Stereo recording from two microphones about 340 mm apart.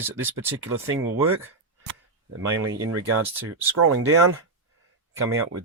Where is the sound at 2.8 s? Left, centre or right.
Right.